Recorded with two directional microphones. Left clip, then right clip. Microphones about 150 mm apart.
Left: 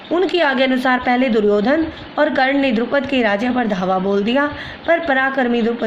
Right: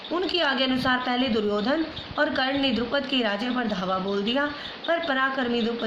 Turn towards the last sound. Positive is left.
turn(degrees=45)  # may be behind; listen again after turning